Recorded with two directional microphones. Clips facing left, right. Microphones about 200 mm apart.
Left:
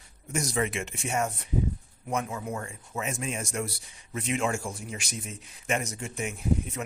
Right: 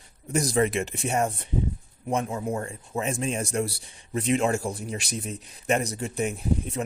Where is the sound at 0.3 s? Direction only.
35° right (ahead or behind).